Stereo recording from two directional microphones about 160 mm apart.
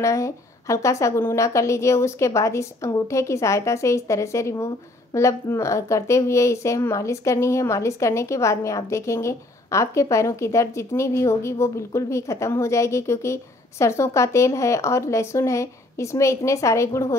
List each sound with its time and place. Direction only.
0.0 s a woman's voice: 20° left (ahead or behind)